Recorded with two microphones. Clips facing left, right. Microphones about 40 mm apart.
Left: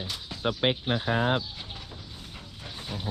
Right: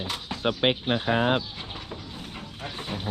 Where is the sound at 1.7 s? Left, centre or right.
Right.